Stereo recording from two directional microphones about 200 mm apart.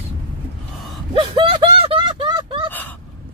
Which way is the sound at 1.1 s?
25° right (ahead or behind).